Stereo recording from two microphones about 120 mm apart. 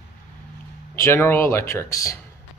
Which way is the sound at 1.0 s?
20° left (ahead or behind).